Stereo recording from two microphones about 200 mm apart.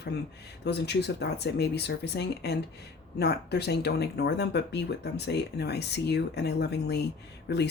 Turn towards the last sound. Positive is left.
turn(degrees=55)  # may be behind; listen again after turning